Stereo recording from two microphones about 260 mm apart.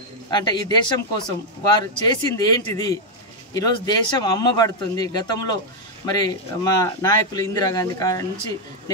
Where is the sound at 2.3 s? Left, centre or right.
Centre.